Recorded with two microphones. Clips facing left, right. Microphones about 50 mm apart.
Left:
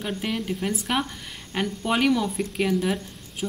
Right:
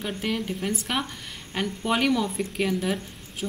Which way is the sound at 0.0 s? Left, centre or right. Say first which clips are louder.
Even; centre.